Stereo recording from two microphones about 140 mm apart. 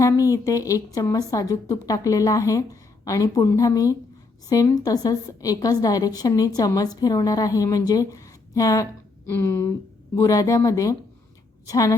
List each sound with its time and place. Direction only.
0.0 s a woman's voice: 25° left (ahead or behind)